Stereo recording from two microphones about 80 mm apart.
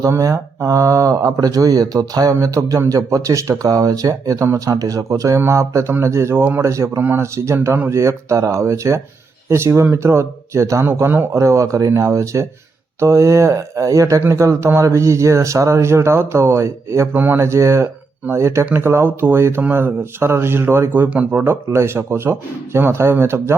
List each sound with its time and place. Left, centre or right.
0.0 s speech: right
11.3 s speech: right
17.2 s speech: right
17.4 s speech: right
21.1 s speech: centre
21.4 s speech: right